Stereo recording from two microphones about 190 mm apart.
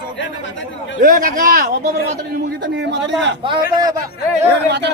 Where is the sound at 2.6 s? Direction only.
70° right (ahead or behind).